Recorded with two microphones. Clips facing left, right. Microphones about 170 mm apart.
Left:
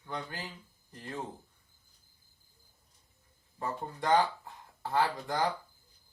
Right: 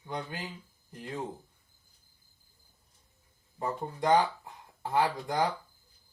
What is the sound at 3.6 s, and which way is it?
Speech, 15° right (ahead or behind).